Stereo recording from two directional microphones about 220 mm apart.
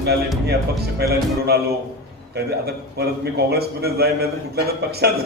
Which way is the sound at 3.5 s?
45° right (ahead or behind).